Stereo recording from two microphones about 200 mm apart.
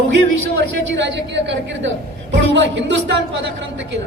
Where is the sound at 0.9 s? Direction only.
60° right (ahead or behind).